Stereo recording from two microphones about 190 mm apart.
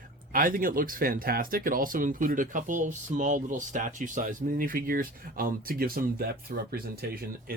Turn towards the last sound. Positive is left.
turn(degrees=-55)  # may be behind; listen again after turning